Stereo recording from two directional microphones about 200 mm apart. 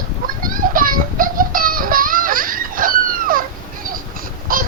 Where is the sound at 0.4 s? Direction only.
45° right (ahead or behind).